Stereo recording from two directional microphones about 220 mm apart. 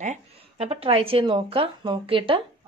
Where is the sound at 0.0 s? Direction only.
30° right (ahead or behind).